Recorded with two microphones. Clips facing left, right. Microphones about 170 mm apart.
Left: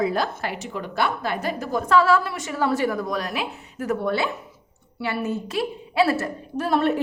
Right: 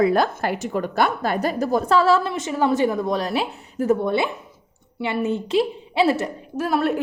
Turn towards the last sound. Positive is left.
turn(degrees=0)  # may be behind; listen again after turning